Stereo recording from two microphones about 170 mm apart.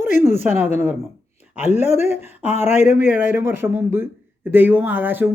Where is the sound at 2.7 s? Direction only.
45° left (ahead or behind).